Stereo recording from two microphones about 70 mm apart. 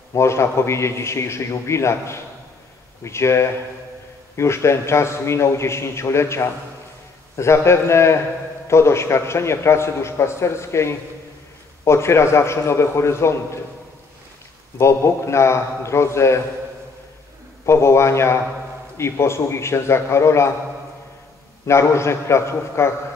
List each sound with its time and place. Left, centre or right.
0.1 s a man's voice: left
14.8 s a man's voice: left
17.6 s a man's voice: left
21.6 s a man's voice: left